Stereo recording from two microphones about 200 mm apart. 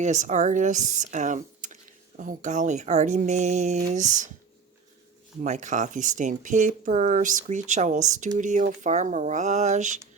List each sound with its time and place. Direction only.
0.0 s speech: 35° right (ahead or behind)
5.4 s speech: 40° right (ahead or behind)